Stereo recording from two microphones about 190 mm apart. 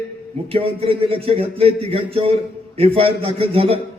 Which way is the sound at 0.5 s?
30° right (ahead or behind).